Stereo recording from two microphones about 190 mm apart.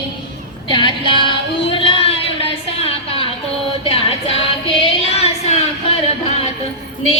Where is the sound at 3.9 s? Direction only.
30° left (ahead or behind).